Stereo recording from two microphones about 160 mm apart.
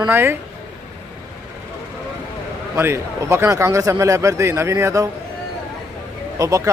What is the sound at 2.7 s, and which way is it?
A man's voice, 15° right (ahead or behind).